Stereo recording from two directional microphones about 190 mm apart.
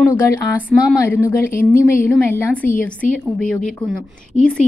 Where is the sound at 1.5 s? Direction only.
45° left (ahead or behind).